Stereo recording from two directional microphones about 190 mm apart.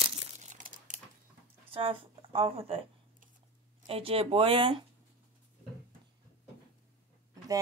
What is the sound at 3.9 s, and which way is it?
Speech, 30° right (ahead or behind).